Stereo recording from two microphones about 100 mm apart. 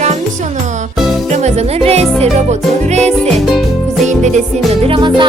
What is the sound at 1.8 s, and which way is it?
Music, 90° right.